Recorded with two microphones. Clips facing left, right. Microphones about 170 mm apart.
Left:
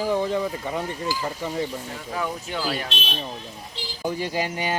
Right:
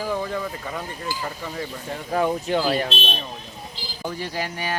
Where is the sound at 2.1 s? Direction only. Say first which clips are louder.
Right 8 dB; 35° right (ahead or behind).